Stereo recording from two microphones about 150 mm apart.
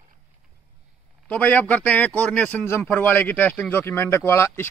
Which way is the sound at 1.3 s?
10° left (ahead or behind).